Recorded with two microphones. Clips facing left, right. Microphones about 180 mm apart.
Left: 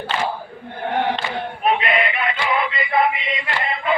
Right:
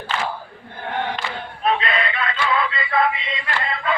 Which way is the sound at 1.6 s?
20° left (ahead or behind).